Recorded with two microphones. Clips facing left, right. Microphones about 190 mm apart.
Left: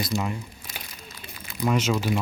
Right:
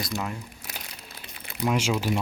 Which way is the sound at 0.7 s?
65° right (ahead or behind).